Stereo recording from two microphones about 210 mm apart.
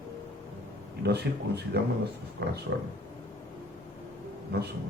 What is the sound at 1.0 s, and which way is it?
Speech, 50° right (ahead or behind).